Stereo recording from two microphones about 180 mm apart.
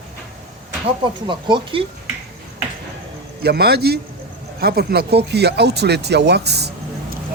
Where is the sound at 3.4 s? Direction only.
60° right (ahead or behind).